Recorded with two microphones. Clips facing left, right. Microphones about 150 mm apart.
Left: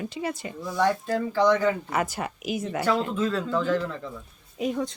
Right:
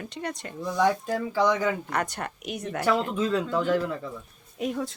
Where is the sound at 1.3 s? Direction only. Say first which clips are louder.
Left 3 dB; 10° right (ahead or behind).